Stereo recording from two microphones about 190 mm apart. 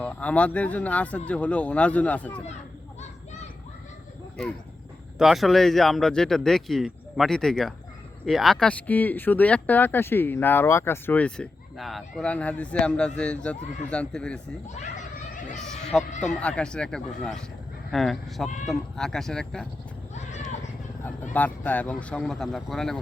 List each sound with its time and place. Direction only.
0.0 s speech: 5° left (ahead or behind)
5.1 s speech: centre (ahead or behind)
14.7 s a sound: 40° left (ahead or behind)
15.6 s speech: 5° left (ahead or behind)
20.1 s vehicle: 35° left (ahead or behind)
21.3 s speech: 10° left (ahead or behind)